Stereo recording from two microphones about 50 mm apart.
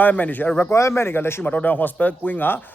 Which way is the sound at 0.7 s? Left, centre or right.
Left.